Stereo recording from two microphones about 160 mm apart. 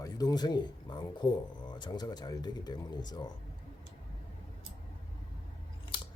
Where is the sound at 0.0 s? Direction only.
25° left (ahead or behind).